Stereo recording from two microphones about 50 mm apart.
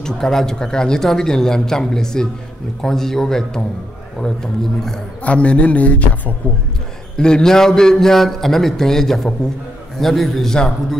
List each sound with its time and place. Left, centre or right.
0.0 s speech: centre
5.2 s a man's voice: left
7.2 s a man's voice: centre